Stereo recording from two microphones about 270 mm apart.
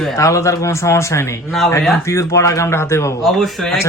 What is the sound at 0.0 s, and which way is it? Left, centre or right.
Speech, centre.